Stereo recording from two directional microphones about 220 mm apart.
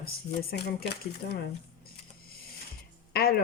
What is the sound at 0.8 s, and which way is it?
Speech, 45° left (ahead or behind).